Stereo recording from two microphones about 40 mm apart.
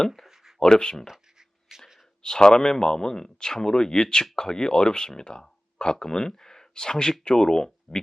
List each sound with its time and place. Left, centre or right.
0.6 s speech: centre
1.0 s a sound: centre
2.2 s speech: centre